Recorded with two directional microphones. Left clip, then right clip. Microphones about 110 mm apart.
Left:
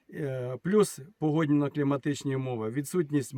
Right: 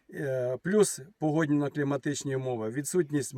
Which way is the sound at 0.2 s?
15° left (ahead or behind).